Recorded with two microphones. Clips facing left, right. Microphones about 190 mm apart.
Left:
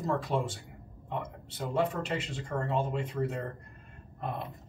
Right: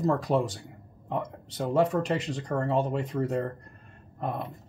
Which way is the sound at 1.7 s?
40° right (ahead or behind).